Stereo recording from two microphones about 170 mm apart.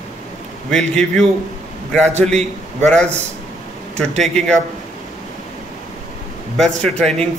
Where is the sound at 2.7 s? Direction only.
5° left (ahead or behind).